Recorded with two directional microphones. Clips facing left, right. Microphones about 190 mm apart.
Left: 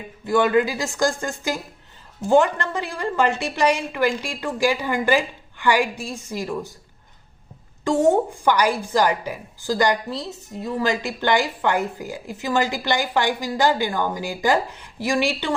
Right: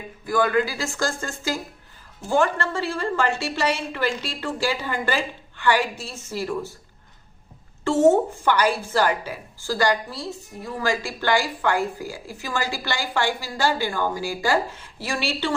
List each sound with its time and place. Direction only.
0.3 s a woman's voice: 25° left (ahead or behind)
7.9 s a woman's voice: 15° left (ahead or behind)